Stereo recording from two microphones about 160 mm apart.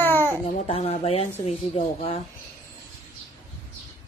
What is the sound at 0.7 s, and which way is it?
Speech, 40° left (ahead or behind).